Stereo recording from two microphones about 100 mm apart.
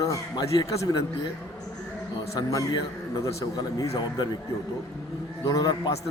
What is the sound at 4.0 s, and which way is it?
Speech, 45° left (ahead or behind).